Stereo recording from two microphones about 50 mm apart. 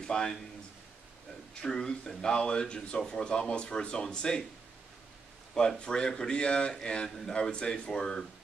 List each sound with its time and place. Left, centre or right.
0.0 s speech: centre
1.5 s speech: centre
5.5 s speech: centre